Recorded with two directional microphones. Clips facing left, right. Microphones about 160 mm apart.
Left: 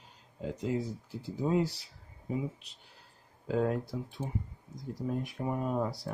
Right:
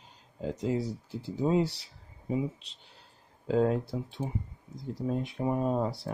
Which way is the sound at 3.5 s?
25° right (ahead or behind).